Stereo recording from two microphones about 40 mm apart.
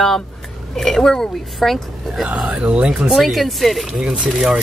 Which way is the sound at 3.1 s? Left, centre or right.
Centre.